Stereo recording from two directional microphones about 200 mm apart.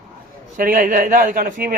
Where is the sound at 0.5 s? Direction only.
45° right (ahead or behind).